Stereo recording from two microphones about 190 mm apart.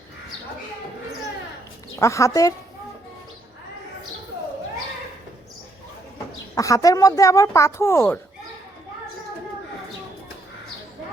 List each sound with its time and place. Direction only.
2.0 s speech: 15° left (ahead or behind)
6.6 s speech: 15° left (ahead or behind)